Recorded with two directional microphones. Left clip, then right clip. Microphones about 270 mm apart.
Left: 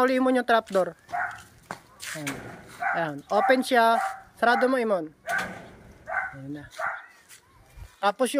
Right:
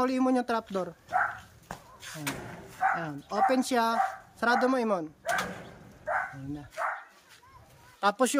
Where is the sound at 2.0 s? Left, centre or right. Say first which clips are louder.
Left 8 dB; left.